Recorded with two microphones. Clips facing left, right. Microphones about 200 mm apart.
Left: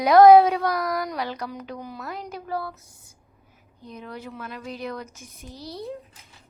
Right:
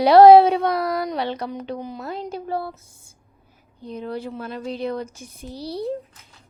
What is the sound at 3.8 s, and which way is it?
Speech, 30° right (ahead or behind).